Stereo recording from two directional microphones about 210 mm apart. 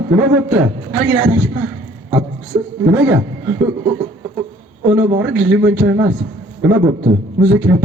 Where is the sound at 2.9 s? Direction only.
10° right (ahead or behind).